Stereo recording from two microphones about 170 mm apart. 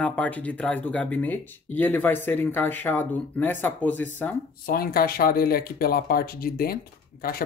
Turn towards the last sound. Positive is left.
turn(degrees=60)  # may be behind; listen again after turning